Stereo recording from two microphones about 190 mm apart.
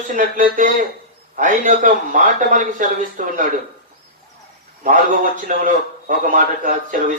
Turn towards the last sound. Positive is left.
turn(degrees=-45)  # may be behind; listen again after turning